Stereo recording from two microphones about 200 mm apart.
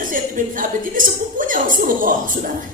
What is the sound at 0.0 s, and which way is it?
Speech, 40° right (ahead or behind).